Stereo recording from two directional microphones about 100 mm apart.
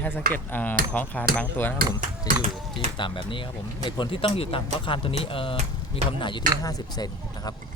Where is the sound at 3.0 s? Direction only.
55° left (ahead or behind).